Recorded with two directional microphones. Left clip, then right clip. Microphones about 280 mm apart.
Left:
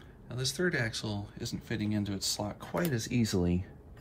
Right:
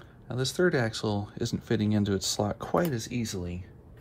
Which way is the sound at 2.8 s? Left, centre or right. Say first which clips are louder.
Right 1 dB; centre.